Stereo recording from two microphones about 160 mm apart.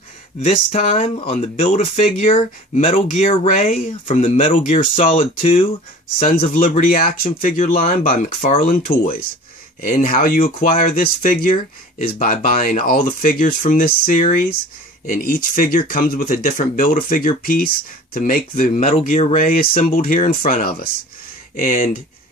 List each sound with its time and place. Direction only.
0.4 s speech: 40° left (ahead or behind)
4.5 s speech: 55° left (ahead or behind)
4.9 s speech: 40° left (ahead or behind)
6.5 s speech: 60° left (ahead or behind)
18.8 s speech: 45° left (ahead or behind)
19.4 s speech: 60° left (ahead or behind)